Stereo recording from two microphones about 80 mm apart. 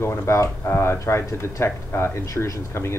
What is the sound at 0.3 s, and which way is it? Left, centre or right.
Speech, left.